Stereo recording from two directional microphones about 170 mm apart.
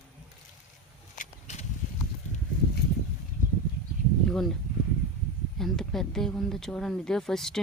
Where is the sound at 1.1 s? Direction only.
45° left (ahead or behind).